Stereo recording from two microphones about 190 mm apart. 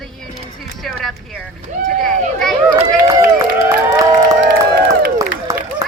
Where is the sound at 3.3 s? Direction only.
15° right (ahead or behind).